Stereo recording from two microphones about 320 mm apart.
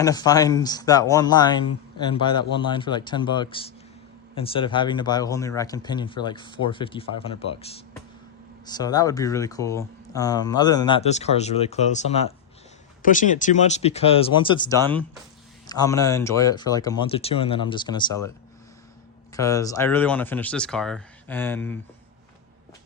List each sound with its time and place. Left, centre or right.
0.0 s speech: centre
19.4 s speech: centre